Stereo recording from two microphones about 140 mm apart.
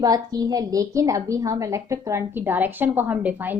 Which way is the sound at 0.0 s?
25° right (ahead or behind).